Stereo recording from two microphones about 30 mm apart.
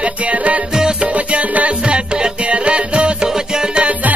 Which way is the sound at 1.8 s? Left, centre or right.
Right.